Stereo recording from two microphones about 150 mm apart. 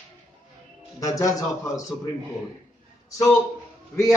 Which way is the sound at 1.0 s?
25° left (ahead or behind).